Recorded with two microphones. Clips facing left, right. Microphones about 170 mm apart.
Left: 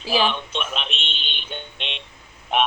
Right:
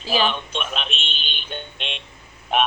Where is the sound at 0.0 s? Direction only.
10° left (ahead or behind).